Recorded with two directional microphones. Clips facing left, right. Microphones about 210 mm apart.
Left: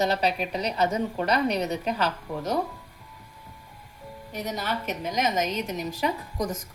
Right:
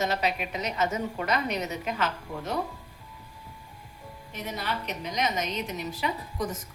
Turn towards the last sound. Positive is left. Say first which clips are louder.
# left 3 dB
turn(degrees=45)  # may be behind; listen again after turning